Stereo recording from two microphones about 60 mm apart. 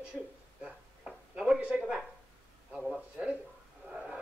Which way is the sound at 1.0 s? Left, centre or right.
Centre.